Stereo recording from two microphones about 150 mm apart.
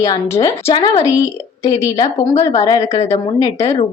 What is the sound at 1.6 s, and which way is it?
Speech, 25° left (ahead or behind).